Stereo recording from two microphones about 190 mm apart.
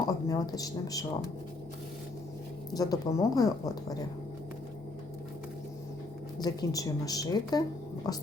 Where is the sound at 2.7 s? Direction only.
20° left (ahead or behind).